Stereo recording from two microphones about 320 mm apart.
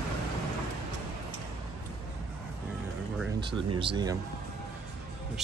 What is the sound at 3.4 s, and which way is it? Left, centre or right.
Speech, centre.